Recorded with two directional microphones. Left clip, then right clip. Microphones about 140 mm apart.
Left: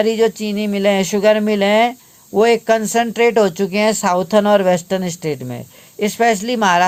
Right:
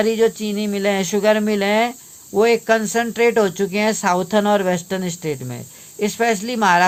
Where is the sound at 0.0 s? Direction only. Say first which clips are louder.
Left 2 dB; 35° left (ahead or behind).